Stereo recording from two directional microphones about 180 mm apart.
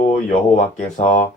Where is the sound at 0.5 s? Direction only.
40° left (ahead or behind).